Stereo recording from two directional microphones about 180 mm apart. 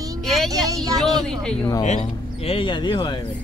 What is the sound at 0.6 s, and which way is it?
Speech, 20° right (ahead or behind).